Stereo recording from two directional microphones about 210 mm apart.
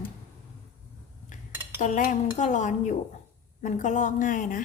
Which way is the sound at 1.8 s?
35° left (ahead or behind).